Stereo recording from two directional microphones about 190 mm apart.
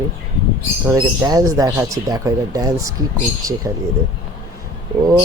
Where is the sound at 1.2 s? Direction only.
20° right (ahead or behind).